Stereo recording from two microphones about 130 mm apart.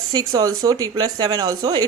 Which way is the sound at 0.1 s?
30° right (ahead or behind).